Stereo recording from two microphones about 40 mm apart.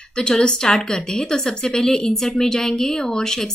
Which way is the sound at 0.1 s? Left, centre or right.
Left.